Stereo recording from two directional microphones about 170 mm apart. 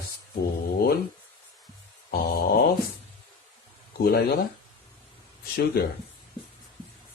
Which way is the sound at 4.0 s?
65° left (ahead or behind).